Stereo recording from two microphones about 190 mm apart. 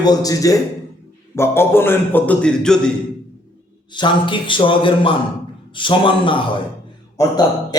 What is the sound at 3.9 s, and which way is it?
Speech, 25° left (ahead or behind).